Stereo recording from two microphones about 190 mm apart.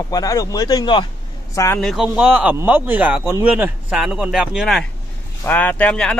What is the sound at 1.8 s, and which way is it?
Speech, centre (ahead or behind).